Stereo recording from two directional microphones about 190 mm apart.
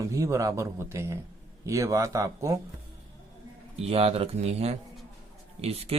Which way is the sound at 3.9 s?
30° right (ahead or behind).